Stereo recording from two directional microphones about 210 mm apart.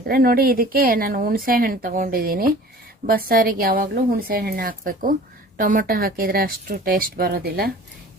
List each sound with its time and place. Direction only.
0.0 s a woman's voice: 45° right (ahead or behind)